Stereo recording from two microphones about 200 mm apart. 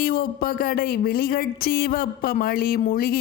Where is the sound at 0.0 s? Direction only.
50° left (ahead or behind).